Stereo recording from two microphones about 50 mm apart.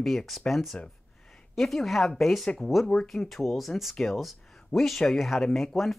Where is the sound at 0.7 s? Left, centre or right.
Centre.